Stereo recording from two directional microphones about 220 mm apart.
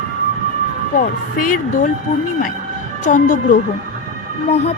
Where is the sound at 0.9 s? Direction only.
40° left (ahead or behind).